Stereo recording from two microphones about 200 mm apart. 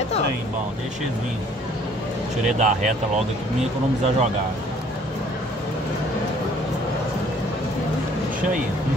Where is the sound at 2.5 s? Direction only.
35° right (ahead or behind).